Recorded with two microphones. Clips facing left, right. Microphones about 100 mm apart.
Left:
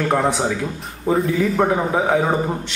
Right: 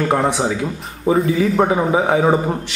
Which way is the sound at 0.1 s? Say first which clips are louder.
Right 1 dB; 5° right (ahead or behind).